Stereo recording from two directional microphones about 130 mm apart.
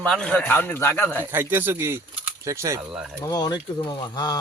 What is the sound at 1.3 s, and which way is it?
Speech, 15° right (ahead or behind).